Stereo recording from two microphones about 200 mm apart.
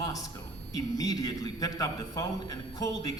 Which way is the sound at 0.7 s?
20° left (ahead or behind).